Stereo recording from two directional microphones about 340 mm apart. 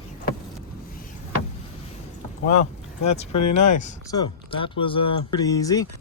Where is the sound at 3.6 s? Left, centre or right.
Left.